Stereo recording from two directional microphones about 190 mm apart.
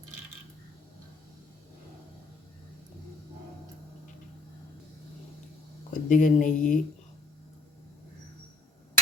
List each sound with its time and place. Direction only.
5.9 s speech: 40° left (ahead or behind)